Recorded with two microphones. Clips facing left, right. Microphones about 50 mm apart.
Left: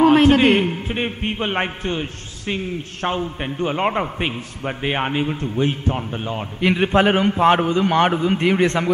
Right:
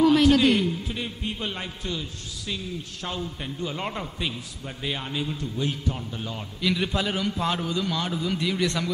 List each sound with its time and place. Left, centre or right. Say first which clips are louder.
0.0 s a man's voice: left 5 dB; left